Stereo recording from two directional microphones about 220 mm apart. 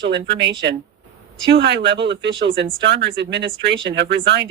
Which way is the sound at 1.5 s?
50° right (ahead or behind).